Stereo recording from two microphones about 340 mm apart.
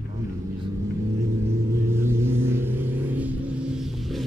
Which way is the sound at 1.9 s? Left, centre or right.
Centre.